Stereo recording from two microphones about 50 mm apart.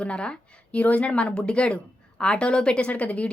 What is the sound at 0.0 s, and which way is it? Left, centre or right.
Speech, left.